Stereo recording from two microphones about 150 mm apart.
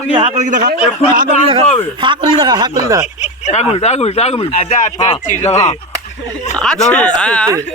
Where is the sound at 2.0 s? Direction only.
30° right (ahead or behind).